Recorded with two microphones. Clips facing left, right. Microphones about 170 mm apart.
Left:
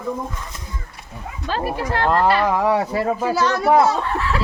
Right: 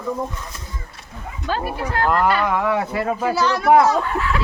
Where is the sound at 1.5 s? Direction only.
30° left (ahead or behind).